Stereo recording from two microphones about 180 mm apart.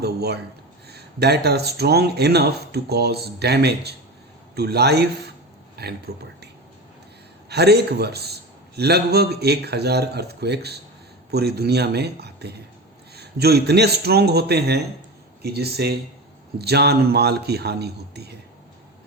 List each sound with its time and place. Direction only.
0.0 s a man's voice: 60° right (ahead or behind)
7.5 s a man's voice: 65° right (ahead or behind)